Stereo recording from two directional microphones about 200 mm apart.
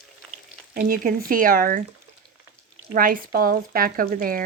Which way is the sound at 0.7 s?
45° right (ahead or behind).